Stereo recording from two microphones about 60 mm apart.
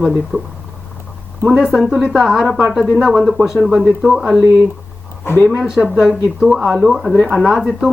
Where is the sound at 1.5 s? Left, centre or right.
Centre.